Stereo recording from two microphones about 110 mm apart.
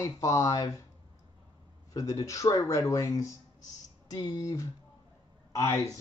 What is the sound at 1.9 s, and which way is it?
Speech, 30° left (ahead or behind).